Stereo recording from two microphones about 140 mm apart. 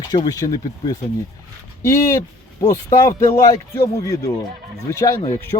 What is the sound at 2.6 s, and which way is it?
Speech, 25° left (ahead or behind).